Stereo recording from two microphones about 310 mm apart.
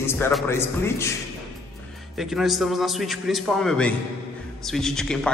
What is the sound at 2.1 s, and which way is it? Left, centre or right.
A man's voice, centre.